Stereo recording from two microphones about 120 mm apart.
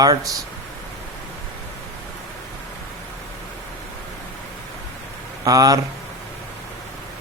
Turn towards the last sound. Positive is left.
turn(degrees=-30)  # may be behind; listen again after turning